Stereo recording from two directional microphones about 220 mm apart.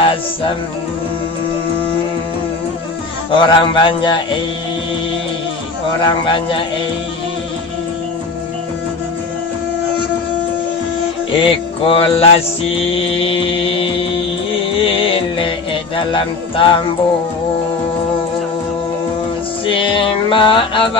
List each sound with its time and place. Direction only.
3.3 s mantra: 20° left (ahead or behind)
6.0 s mantra: 20° left (ahead or behind)
11.3 s mantra: 25° left (ahead or behind)
14.8 s music: 25° left (ahead or behind)
19.6 s mantra: 25° left (ahead or behind)